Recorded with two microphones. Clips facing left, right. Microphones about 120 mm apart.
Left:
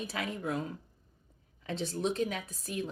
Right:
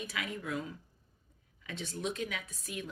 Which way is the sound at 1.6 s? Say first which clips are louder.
Left 5 dB; 35° left (ahead or behind).